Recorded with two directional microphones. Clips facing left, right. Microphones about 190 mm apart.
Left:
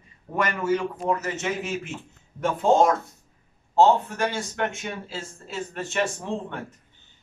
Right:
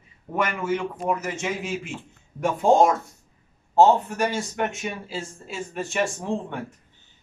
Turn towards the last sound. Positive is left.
turn(degrees=-15)  # may be behind; listen again after turning